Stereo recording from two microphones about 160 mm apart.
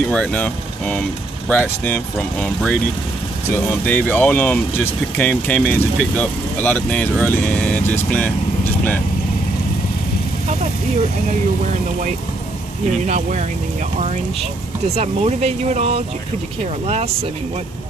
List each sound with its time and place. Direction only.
0.1 s speech: 5° left (ahead or behind)
13.0 s speech: 50° right (ahead or behind)
15.0 s speech: 40° right (ahead or behind)